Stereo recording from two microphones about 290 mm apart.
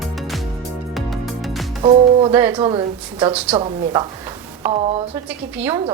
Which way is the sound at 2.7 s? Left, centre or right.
Centre.